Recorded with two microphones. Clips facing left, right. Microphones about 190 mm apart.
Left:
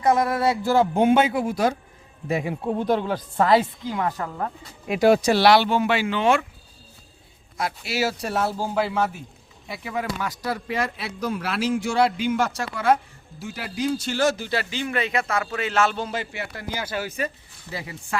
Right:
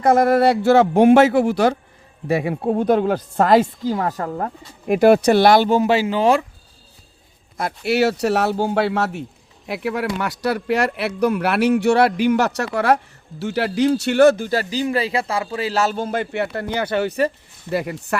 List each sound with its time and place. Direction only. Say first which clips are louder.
0.0 s a man's voice: right 6 dB; 60° right (ahead or behind)
2.6 s a woman's voice: right 6 dB; 50° right (ahead or behind); by 6.4 s 35° right (ahead or behind)
7.9 s a man's voice: right 10 dB; 65° right (ahead or behind)